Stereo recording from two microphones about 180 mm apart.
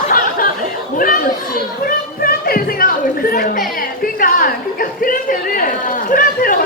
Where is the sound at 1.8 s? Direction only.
55° left (ahead or behind).